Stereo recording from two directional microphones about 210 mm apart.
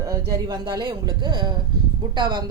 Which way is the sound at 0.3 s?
20° right (ahead or behind).